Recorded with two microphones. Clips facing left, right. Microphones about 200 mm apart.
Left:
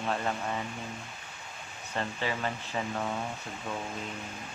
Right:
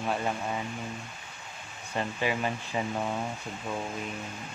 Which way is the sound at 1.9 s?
15° right (ahead or behind).